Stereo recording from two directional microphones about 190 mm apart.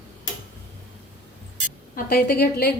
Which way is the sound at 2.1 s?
55° left (ahead or behind).